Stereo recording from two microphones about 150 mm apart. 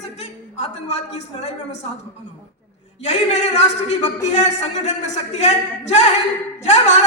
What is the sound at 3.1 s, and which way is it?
A man's voice, 50° left (ahead or behind).